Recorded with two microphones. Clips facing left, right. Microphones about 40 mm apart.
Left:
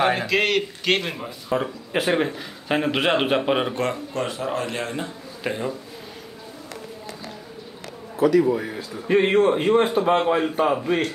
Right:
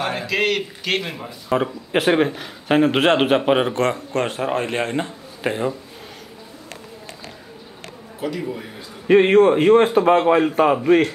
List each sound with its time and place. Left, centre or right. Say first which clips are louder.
0.0 s speech: left 4 dB; centre
0.3 s speech: even; centre
1.5 s a man's voice: right 4 dB; right
8.2 s a man's voice: left 9 dB; left
9.0 s a man's voice: right 5 dB; right